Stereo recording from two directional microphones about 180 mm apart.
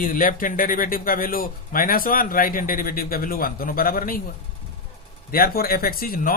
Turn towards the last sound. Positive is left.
turn(degrees=55)  # may be behind; listen again after turning